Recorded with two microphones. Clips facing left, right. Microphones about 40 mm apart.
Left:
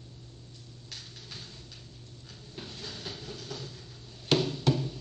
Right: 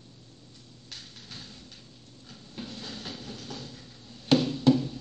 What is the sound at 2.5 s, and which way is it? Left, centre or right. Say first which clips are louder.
Train: right 3 dB; right.